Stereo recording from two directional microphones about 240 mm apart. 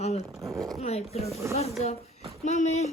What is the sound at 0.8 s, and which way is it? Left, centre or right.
A woman's voice, left.